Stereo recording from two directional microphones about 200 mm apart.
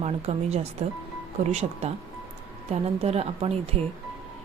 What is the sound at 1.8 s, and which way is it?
A woman's voice, 30° right (ahead or behind).